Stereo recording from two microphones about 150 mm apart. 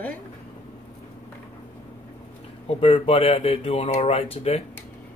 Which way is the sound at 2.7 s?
40° left (ahead or behind).